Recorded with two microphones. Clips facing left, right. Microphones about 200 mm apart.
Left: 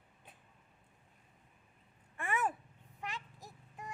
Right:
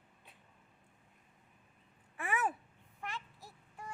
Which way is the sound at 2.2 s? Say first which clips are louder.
Even; 5° right (ahead or behind).